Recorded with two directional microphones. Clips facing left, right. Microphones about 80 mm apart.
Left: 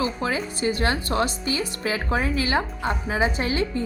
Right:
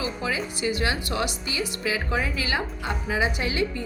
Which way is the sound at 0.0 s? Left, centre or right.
Left.